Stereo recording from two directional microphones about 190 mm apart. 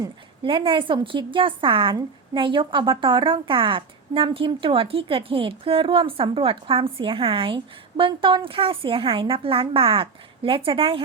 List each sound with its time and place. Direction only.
0.0 s a woman's voice: 25° right (ahead or behind)